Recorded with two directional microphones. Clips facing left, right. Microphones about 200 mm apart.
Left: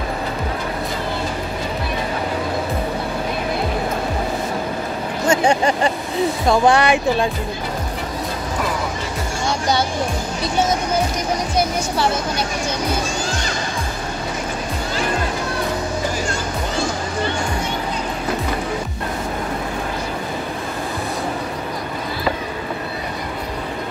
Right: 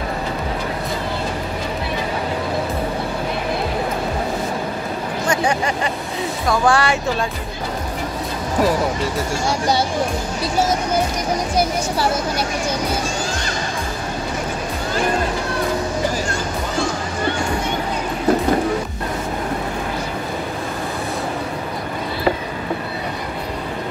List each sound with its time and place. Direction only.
6.4 s speech: 25° left (ahead or behind)